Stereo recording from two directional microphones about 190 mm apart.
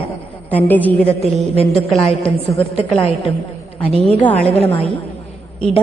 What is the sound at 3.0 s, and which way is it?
Speech, 30° left (ahead or behind).